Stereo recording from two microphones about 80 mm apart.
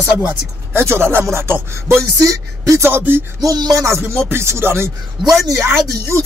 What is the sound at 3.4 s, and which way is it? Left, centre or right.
Music, right.